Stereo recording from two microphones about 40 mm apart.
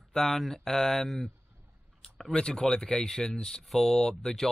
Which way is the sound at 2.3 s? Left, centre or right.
Left.